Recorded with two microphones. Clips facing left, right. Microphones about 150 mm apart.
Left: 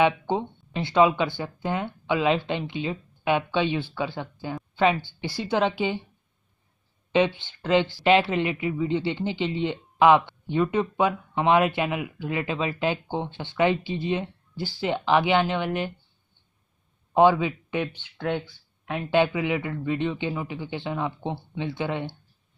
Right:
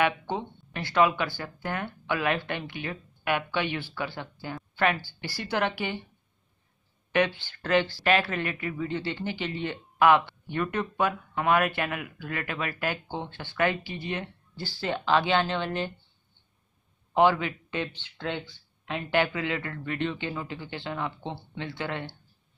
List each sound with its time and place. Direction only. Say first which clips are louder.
0.0 s a man's voice: left 5 dB; 20° left (ahead or behind)
7.1 s speech: left 4 dB; 20° left (ahead or behind)
17.1 s a man's voice: left 4 dB; 15° left (ahead or behind)